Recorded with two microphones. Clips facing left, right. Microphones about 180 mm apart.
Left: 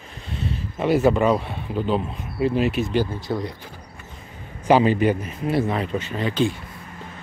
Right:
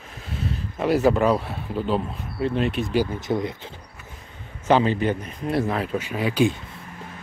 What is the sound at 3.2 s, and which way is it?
Speech, 20° right (ahead or behind).